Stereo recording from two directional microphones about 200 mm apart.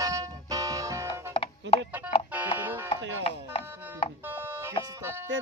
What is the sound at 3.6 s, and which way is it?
Speech, 10° right (ahead or behind).